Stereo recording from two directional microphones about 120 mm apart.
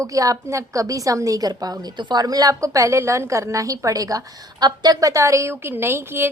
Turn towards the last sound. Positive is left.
turn(degrees=-20)  # may be behind; listen again after turning